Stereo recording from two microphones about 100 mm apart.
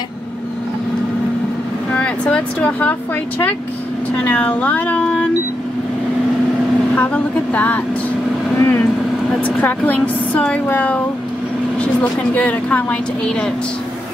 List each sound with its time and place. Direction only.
2.0 s speech: 10° left (ahead or behind)
4.2 s a woman's voice: 15° left (ahead or behind)
7.0 s a woman's voice: 15° left (ahead or behind)
8.5 s vehicle: 20° left (ahead or behind)
9.4 s a woman's voice: 15° left (ahead or behind)